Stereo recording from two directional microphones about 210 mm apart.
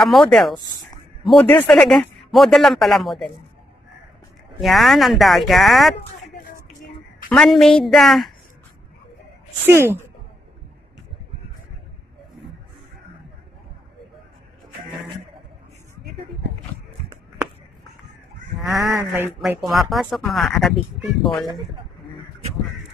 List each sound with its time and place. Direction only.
0.0 s a man's voice: centre (ahead or behind)
4.6 s a man's voice: centre (ahead or behind)
7.2 s a man's voice: 5° left (ahead or behind)
9.7 s speech: 10° right (ahead or behind)
18.6 s speech: centre (ahead or behind)
18.9 s speech: 10° right (ahead or behind)
19.6 s a man's voice: centre (ahead or behind)